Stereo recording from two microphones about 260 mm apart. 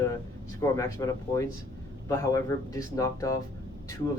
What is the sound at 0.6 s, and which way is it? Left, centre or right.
Speech, centre.